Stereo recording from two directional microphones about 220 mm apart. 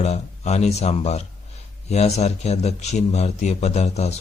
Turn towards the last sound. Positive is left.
turn(degrees=30)  # may be behind; listen again after turning